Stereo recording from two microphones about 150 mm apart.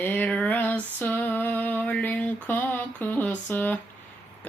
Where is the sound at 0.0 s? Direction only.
10° left (ahead or behind).